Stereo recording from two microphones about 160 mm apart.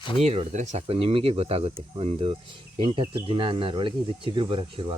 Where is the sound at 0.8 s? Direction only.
35° right (ahead or behind).